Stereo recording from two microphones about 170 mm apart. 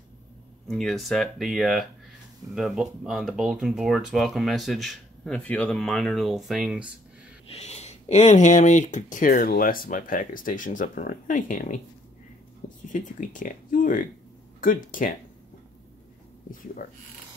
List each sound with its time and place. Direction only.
0.7 s speech: centre (ahead or behind)
7.5 s speech: 40° left (ahead or behind)